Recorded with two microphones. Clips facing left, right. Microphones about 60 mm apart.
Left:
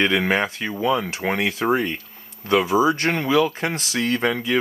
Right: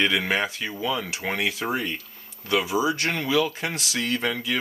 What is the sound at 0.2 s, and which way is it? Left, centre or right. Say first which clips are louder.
Speech: left 4 dB; centre.